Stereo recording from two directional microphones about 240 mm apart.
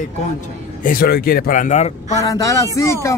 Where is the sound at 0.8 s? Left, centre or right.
Left.